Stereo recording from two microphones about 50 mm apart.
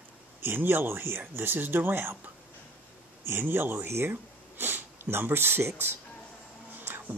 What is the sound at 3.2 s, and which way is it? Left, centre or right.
Speech, right.